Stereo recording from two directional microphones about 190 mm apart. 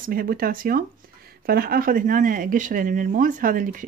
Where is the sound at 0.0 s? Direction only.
50° right (ahead or behind).